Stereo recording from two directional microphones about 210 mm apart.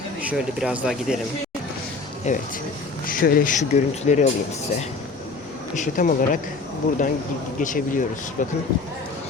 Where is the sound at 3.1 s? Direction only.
45° left (ahead or behind).